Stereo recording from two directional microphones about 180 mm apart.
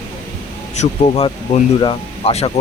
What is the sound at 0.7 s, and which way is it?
Speech, 35° left (ahead or behind).